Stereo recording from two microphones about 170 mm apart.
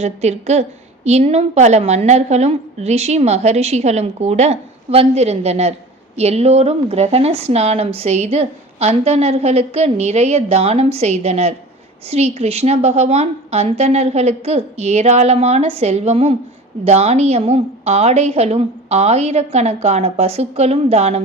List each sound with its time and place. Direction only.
0.0 s speech: 40° right (ahead or behind)